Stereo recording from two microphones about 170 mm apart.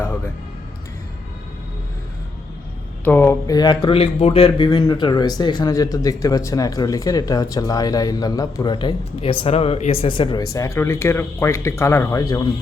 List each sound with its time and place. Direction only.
3.0 s speech: 10° left (ahead or behind)